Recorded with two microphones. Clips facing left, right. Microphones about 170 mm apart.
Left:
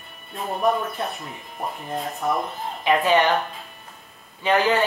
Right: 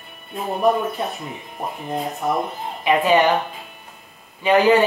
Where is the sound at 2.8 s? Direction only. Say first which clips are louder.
Right 2 dB; 15° right (ahead or behind).